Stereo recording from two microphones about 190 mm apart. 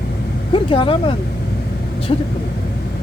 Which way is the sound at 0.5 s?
25° left (ahead or behind).